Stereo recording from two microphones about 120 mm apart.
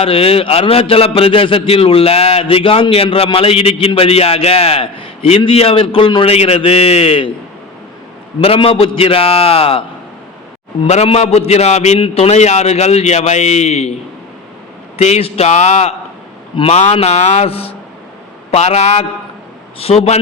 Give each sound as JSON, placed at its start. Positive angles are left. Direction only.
{"t": 0.0, "sound": "a man's voice", "side_deg": 50}
{"t": 8.4, "sound": "a man's voice", "side_deg": 50}
{"t": 10.8, "sound": "a man's voice", "side_deg": 65}
{"t": 11.9, "sound": "a man's voice", "side_deg": 50}
{"t": 14.9, "sound": "a man's voice", "side_deg": 65}
{"t": 18.5, "sound": "a man's voice", "side_deg": 65}